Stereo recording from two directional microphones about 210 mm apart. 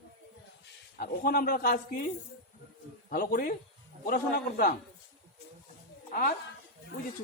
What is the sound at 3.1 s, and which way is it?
Speech, 45° left (ahead or behind).